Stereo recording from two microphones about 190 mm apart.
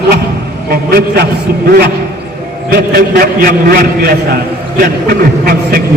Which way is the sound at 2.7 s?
50° right (ahead or behind).